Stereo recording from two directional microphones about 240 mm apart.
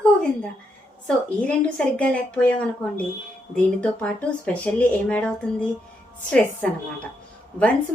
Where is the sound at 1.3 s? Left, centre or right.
Centre.